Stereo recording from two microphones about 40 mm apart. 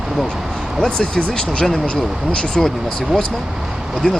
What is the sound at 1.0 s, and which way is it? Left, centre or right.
Speech, left.